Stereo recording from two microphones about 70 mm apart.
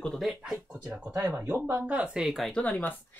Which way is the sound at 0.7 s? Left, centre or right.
Centre.